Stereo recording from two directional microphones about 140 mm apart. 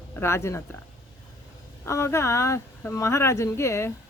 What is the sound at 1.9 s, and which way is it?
A woman's voice, 20° left (ahead or behind).